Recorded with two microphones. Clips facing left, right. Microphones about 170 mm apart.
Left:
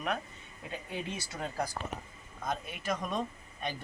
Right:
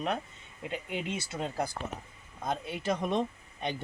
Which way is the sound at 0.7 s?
20° right (ahead or behind).